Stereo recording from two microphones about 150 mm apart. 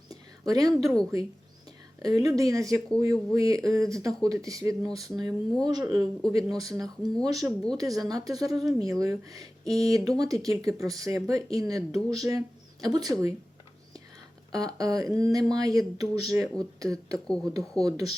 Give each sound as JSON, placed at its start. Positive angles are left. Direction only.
{"t": 0.1, "sound": "a sound", "side_deg": -25}
{"t": 2.0, "sound": "speech", "side_deg": -25}
{"t": 14.5, "sound": "speech", "side_deg": -25}